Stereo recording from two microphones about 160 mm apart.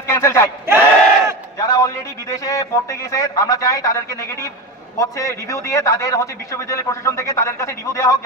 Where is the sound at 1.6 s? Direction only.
20° left (ahead or behind).